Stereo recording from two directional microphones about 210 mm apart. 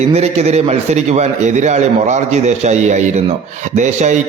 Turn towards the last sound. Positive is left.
turn(degrees=-35)  # may be behind; listen again after turning